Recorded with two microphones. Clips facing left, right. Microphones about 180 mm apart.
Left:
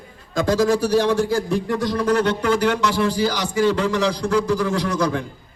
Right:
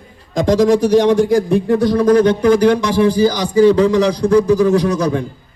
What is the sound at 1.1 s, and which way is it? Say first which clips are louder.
A man's voice: right 7 dB; 15° right (ahead or behind).